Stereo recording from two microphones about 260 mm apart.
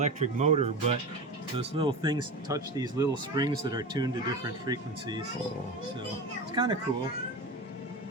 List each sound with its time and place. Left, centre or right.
0.0 s speech: right
6.5 s speech: centre